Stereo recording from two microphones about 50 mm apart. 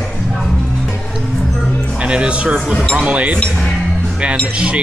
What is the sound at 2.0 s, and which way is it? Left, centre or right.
Speech, right.